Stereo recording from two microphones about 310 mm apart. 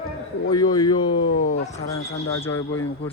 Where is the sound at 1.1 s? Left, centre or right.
Left.